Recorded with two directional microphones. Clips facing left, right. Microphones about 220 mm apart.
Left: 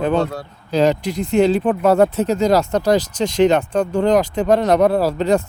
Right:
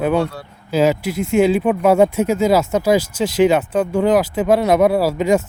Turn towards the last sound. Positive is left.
turn(degrees=-10)  # may be behind; listen again after turning